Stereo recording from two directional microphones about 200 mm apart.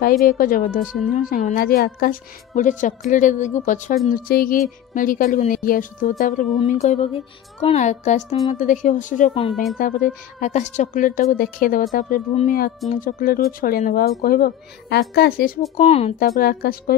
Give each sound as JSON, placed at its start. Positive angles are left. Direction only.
{"t": 0.0, "sound": "a woman's voice", "side_deg": 45}
{"t": 9.5, "sound": "a woman's voice", "side_deg": 0}
{"t": 9.8, "sound": "a woman's voice", "side_deg": 40}
{"t": 15.7, "sound": "a woman's voice", "side_deg": 35}
{"t": 16.2, "sound": "a woman's voice", "side_deg": 45}